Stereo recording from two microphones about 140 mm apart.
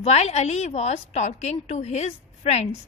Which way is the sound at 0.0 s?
50° left (ahead or behind).